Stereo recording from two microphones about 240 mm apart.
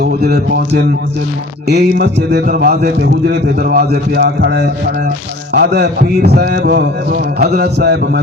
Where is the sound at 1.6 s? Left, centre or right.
Right.